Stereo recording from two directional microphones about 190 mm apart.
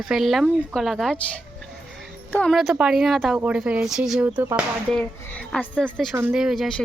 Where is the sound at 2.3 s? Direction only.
Centre (ahead or behind).